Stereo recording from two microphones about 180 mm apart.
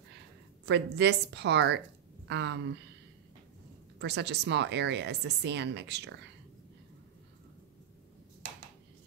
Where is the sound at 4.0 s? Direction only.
70° right (ahead or behind).